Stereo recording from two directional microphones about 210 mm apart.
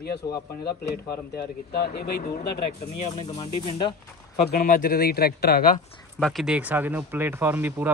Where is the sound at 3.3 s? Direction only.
25° left (ahead or behind).